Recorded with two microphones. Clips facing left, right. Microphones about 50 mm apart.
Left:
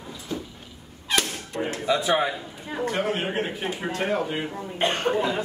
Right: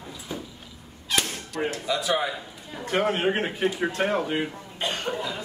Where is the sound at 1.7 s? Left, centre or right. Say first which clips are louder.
Left 4 dB; left.